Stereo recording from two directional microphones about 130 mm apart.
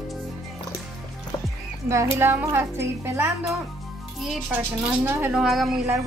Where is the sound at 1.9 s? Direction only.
20° right (ahead or behind); by 5.8 s centre (ahead or behind).